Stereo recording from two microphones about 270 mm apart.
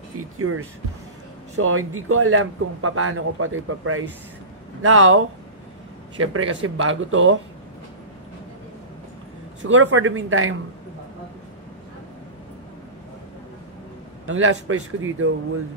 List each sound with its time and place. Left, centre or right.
0.2 s a man's voice: right
9.6 s a man's voice: right
14.2 s a man's voice: right